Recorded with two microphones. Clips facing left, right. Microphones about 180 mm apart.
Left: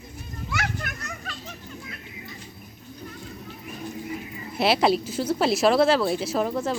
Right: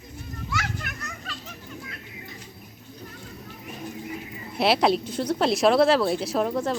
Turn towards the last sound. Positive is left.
turn(degrees=0)  # may be behind; listen again after turning